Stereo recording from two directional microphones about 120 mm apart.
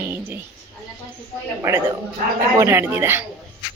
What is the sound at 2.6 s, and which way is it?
Speech, 20° right (ahead or behind).